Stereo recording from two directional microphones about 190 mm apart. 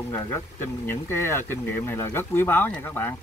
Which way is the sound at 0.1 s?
15° left (ahead or behind).